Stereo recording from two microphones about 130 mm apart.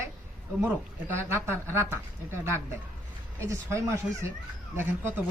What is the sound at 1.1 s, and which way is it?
A man's voice, 20° right (ahead or behind).